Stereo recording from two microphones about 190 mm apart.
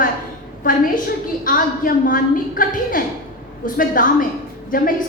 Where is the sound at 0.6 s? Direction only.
45° left (ahead or behind).